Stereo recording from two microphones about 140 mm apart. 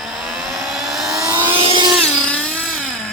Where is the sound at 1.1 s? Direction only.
20° right (ahead or behind).